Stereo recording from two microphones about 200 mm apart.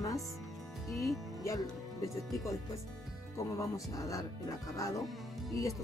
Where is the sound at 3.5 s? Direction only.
15° left (ahead or behind).